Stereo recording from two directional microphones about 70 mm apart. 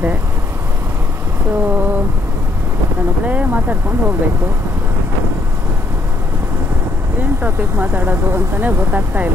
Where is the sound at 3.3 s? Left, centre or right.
Right.